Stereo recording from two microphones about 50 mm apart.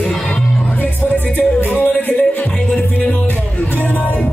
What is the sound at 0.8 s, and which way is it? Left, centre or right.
Music, left.